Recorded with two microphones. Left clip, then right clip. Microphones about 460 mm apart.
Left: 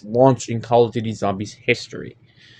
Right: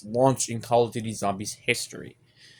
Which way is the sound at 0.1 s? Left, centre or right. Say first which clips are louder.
Left 7 dB; right.